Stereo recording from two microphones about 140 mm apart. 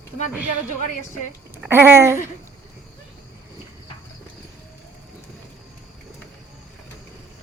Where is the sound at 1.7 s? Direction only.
15° right (ahead or behind).